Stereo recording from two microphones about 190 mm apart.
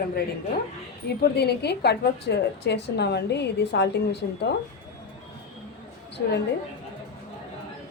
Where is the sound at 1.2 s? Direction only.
60° left (ahead or behind).